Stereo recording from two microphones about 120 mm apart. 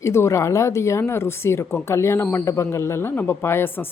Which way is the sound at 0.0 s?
25° left (ahead or behind).